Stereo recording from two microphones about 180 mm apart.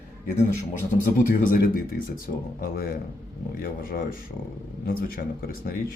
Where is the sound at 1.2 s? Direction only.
50° left (ahead or behind).